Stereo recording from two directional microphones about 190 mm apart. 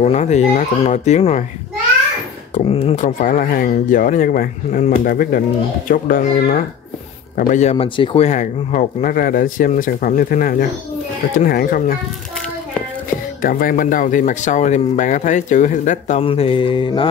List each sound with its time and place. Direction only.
0.0 s speech: 35° left (ahead or behind)
2.5 s speech: 30° left (ahead or behind)
7.7 s speech: 25° left (ahead or behind); by 12.0 s 50° left (ahead or behind)
13.4 s speech: 50° left (ahead or behind); by 17.1 s 25° left (ahead or behind)